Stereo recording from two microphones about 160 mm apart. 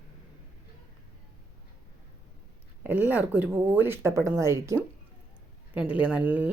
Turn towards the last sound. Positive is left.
turn(degrees=-10)  # may be behind; listen again after turning